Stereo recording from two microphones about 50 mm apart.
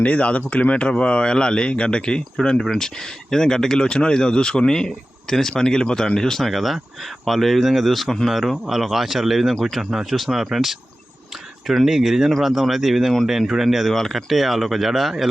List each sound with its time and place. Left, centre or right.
0.0 s speech: left; by 13.9 s centre
13.9 s speech: centre